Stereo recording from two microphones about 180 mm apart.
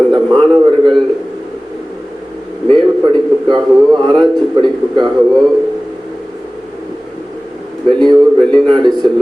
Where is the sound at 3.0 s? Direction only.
25° right (ahead or behind).